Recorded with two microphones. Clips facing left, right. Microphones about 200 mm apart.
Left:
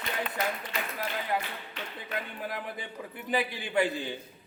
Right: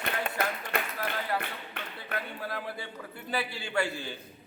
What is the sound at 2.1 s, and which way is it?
A man's voice, 15° left (ahead or behind).